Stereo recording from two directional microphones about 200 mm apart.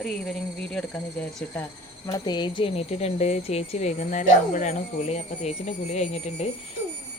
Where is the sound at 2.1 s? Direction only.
20° left (ahead or behind).